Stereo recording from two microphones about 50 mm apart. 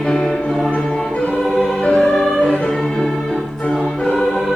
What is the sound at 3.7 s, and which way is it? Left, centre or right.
Music, centre.